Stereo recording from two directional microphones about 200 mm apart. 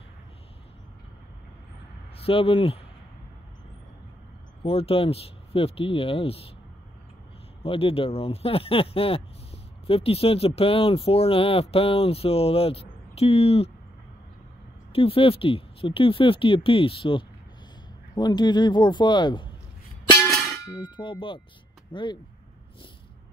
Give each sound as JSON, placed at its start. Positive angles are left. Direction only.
{"t": 2.1, "sound": "speech", "side_deg": 30}
{"t": 4.6, "sound": "speech", "side_deg": 30}
{"t": 7.6, "sound": "speech", "side_deg": 30}
{"t": 14.9, "sound": "speech", "side_deg": 30}
{"t": 20.2, "sound": "a sound", "side_deg": 0}
{"t": 20.6, "sound": "speech", "side_deg": 20}